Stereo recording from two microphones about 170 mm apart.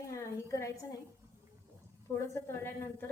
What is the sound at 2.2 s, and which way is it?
Speech, 15° left (ahead or behind).